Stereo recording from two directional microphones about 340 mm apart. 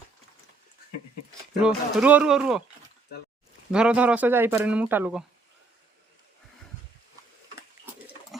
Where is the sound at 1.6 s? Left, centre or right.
Centre.